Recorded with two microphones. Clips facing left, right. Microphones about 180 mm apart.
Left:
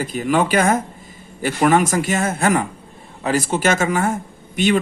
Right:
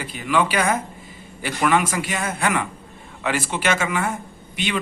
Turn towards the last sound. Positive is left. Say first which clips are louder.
# left 8 dB
turn(degrees=45)  # may be behind; listen again after turning